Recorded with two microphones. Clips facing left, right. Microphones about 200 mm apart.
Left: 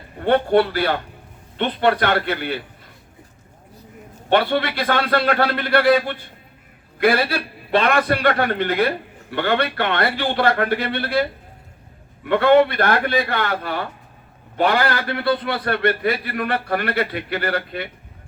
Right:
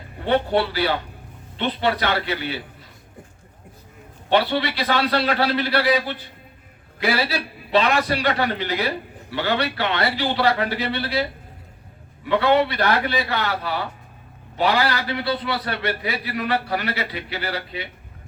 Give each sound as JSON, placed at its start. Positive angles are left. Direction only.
{"t": 0.3, "sound": "a man's voice", "side_deg": 55}
{"t": 4.3, "sound": "a man's voice", "side_deg": 50}